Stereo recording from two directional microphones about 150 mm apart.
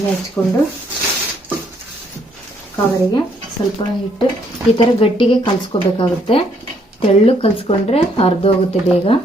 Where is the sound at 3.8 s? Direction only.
30° left (ahead or behind).